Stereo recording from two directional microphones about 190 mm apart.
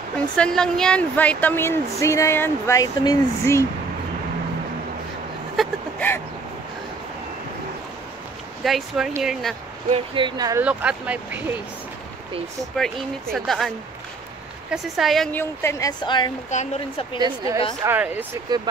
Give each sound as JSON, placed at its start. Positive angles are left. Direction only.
{"t": 0.4, "sound": "speech", "side_deg": 5}
{"t": 5.6, "sound": "vehicle", "side_deg": 10}
{"t": 8.6, "sound": "speech", "side_deg": 0}
{"t": 9.8, "sound": "speech", "side_deg": -30}
{"t": 10.6, "sound": "speech", "side_deg": -5}
{"t": 12.7, "sound": "speech", "side_deg": 5}
{"t": 14.7, "sound": "speech", "side_deg": 0}
{"t": 15.3, "sound": "speech", "side_deg": 15}
{"t": 16.4, "sound": "speech", "side_deg": 40}
{"t": 17.8, "sound": "speech", "side_deg": -10}